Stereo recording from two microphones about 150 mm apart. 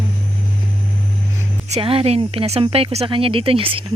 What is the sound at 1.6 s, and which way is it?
Speech, 40° right (ahead or behind).